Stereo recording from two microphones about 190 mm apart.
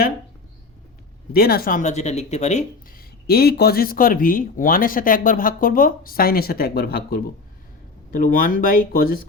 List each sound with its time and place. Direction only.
1.3 s speech: 55° left (ahead or behind)